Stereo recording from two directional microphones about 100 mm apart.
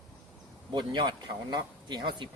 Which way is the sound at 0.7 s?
50° right (ahead or behind).